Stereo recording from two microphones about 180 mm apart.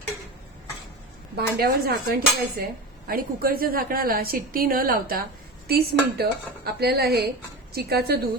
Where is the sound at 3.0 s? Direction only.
55° right (ahead or behind).